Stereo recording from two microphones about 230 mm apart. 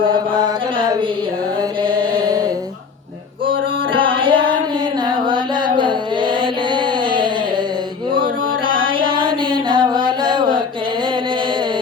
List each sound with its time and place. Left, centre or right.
0.4 s a sound: centre
1.8 s chant: centre
4.0 s music: right
8.1 s mantra: right
9.0 s music: centre